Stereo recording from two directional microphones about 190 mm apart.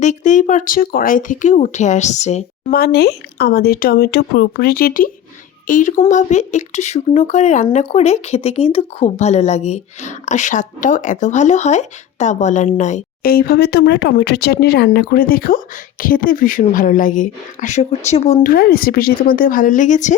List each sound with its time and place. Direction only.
0.0 s speech: 40° left (ahead or behind)
2.7 s speech: 55° left (ahead or behind); by 18.5 s 35° left (ahead or behind)
18.5 s speech: 50° left (ahead or behind)